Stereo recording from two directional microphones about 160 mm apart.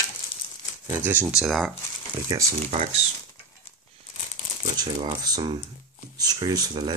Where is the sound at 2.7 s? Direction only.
45° right (ahead or behind).